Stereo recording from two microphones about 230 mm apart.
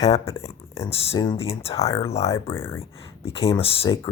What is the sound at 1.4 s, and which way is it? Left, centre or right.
Speech, left.